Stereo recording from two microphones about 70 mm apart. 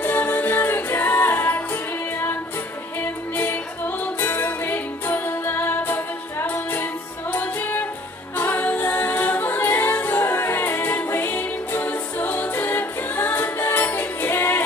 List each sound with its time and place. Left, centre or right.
0.0 s music: left
3.0 s music: left